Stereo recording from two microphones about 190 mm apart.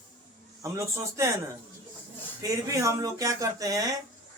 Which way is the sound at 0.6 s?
15° right (ahead or behind).